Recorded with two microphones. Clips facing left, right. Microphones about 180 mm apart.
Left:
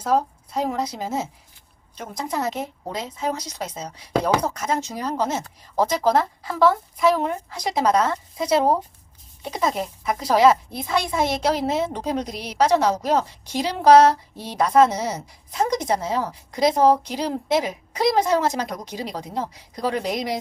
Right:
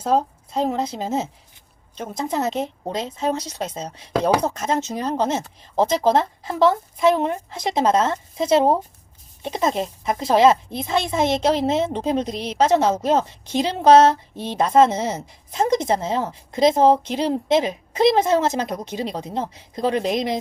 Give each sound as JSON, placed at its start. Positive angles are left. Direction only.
{"t": 0.0, "sound": "a woman's voice", "side_deg": -25}